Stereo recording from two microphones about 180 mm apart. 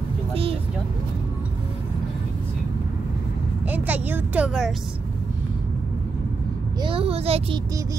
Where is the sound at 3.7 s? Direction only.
10° right (ahead or behind).